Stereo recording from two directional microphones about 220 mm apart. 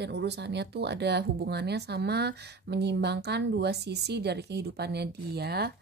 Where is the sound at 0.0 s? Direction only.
50° right (ahead or behind).